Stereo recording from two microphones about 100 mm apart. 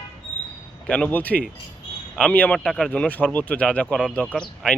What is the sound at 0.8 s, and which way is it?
A man's voice, 15° left (ahead or behind).